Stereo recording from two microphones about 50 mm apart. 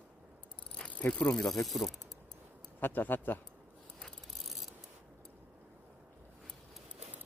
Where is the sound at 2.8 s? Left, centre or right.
Left.